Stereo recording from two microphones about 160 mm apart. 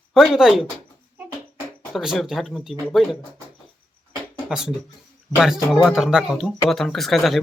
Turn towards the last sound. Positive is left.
turn(degrees=0)  # may be behind; listen again after turning